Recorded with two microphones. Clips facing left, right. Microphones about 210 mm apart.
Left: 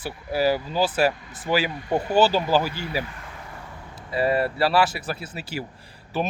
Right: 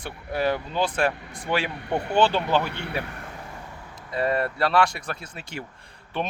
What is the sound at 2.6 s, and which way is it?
Speech, 70° right (ahead or behind).